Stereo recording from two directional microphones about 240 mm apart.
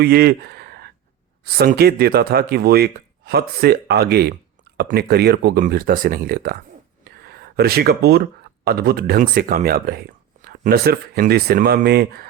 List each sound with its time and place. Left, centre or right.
0.0 s speech: right